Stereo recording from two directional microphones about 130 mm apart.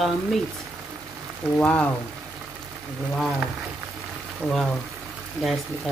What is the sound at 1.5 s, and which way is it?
Speech, 10° left (ahead or behind).